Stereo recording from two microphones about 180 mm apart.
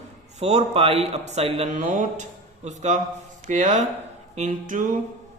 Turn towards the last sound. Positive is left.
turn(degrees=-45)  # may be behind; listen again after turning